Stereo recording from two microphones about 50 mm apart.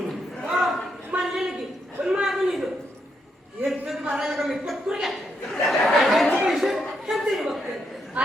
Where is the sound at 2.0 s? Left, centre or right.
Centre.